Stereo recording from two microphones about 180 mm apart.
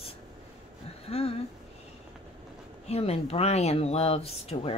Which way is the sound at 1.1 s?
35° left (ahead or behind).